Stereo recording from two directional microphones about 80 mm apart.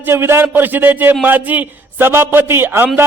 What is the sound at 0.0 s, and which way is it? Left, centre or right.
A man's voice, right.